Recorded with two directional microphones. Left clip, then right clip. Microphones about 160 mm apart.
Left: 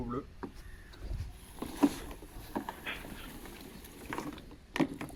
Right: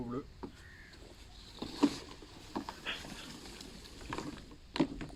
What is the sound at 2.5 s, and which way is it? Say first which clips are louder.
Boat: left 3 dB; 30° left (ahead or behind).